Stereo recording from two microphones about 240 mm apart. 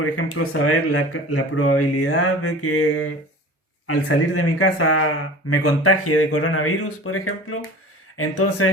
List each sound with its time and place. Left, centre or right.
0.0 s speech: left